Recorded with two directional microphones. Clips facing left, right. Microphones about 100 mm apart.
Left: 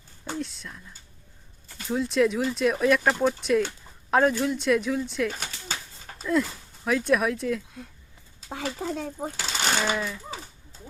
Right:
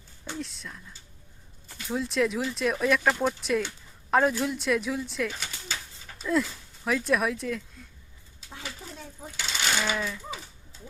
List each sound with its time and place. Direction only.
0.3 s speech: centre (ahead or behind)
1.9 s speech: centre (ahead or behind)
5.3 s a sound: 45° left (ahead or behind)
6.4 s speech: centre (ahead or behind)
8.4 s speech: 90° left
9.4 s speech: 40° left (ahead or behind)
9.9 s speech: 5° left (ahead or behind)